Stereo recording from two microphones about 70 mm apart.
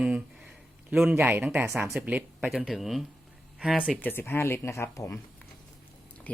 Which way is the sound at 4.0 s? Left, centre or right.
Left.